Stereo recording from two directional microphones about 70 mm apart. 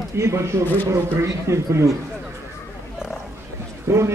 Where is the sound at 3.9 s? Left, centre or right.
Right.